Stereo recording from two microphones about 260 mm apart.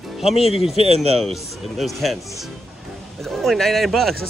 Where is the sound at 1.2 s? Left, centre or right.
Centre.